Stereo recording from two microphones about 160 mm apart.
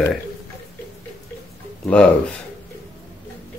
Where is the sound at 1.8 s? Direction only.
5° left (ahead or behind).